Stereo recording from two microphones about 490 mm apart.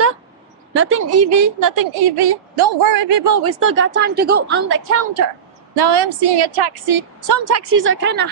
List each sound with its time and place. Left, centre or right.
0.7 s a woman's voice: right
3.4 s a woman's voice: right
5.8 s a woman's voice: right